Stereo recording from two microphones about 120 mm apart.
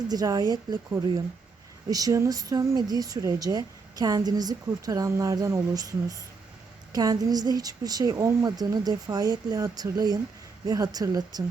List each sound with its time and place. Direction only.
0.1 s speech: 30° right (ahead or behind)
1.9 s speech: 30° right (ahead or behind)